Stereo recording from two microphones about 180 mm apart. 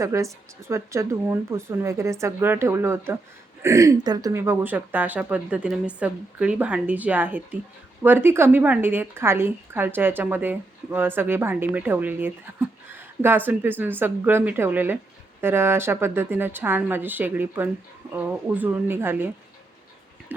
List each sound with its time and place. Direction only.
0.0 s a woman's voice: 15° right (ahead or behind)